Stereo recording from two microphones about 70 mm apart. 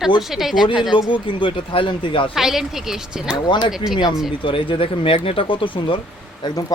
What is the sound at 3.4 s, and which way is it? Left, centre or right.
Speech, left.